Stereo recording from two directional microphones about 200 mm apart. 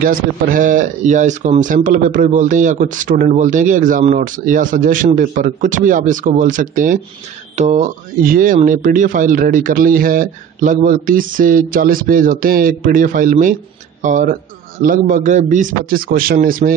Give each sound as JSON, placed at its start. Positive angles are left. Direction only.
{"t": 0.0, "sound": "speech", "side_deg": -45}